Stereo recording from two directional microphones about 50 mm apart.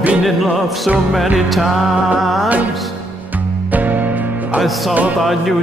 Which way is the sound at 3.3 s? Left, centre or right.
Right.